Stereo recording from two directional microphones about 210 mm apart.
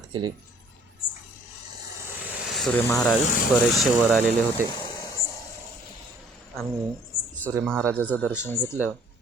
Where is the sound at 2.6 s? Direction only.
Centre (ahead or behind).